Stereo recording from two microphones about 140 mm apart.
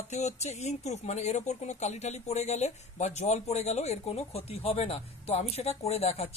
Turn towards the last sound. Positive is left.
turn(degrees=50)  # may be behind; listen again after turning